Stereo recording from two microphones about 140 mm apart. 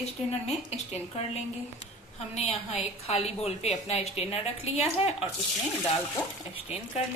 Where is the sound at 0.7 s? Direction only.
50° left (ahead or behind).